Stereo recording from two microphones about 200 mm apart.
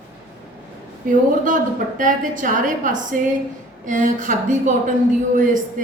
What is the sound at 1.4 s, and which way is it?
A woman's voice, 40° right (ahead or behind).